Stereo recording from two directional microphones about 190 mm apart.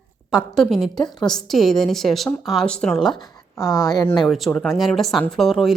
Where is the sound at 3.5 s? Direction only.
20° left (ahead or behind).